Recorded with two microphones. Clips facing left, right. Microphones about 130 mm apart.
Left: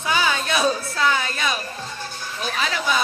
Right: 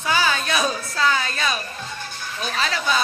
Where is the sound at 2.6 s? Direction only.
10° left (ahead or behind).